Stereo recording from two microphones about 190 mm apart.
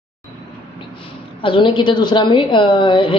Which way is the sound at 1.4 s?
25° left (ahead or behind).